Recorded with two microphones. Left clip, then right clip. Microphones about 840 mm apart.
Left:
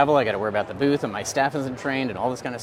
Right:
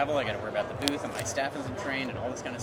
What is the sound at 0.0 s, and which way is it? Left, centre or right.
Speech, left.